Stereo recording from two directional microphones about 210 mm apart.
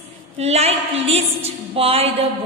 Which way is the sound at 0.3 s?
30° right (ahead or behind).